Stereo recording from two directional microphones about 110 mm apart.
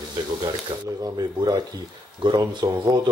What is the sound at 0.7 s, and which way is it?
Speech, 40° right (ahead or behind).